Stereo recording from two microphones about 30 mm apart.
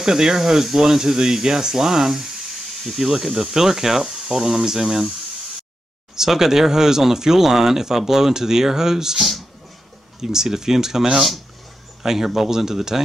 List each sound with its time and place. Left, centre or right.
0.0 s speech: centre
6.1 s speech: centre
10.2 s speech: centre